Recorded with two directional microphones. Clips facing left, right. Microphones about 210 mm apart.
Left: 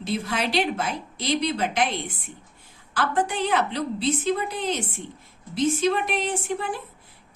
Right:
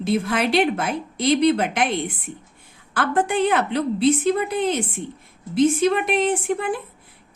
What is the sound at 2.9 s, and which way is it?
Speech, 55° right (ahead or behind).